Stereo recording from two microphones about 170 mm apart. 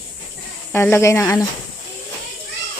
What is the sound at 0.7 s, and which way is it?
Speech, 15° left (ahead or behind).